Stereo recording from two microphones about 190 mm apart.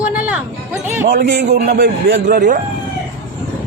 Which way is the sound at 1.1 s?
55° right (ahead or behind).